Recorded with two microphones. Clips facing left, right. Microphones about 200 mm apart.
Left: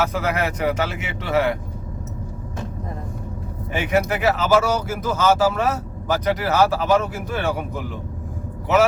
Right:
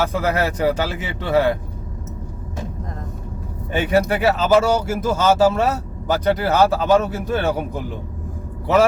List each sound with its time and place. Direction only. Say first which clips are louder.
0.0 s speech: right 2 dB; 30° right (ahead or behind)
3.7 s speech: right 3 dB; 30° right (ahead or behind)